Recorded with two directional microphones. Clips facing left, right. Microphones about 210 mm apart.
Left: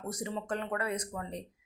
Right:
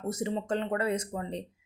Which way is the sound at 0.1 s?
25° right (ahead or behind).